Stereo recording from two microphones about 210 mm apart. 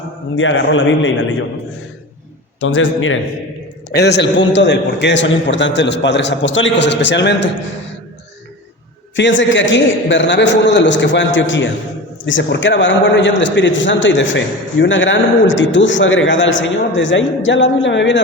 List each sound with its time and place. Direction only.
0.3 s a man's voice: 65° left (ahead or behind)
2.6 s a man's voice: 65° left (ahead or behind)
3.9 s a man's voice: 55° left (ahead or behind)
9.1 s a man's voice: 60° left (ahead or behind)